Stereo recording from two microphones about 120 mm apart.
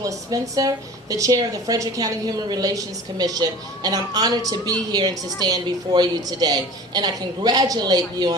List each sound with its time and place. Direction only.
0.0 s a woman's voice: 30° right (ahead or behind)